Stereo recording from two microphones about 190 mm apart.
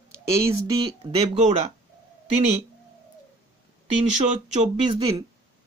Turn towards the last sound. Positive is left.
turn(degrees=-25)  # may be behind; listen again after turning